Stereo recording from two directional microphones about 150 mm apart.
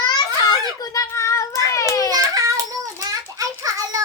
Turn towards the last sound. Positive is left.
turn(degrees=-20)  # may be behind; listen again after turning